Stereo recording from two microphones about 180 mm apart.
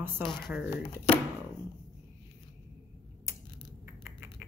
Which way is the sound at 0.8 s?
30° left (ahead or behind).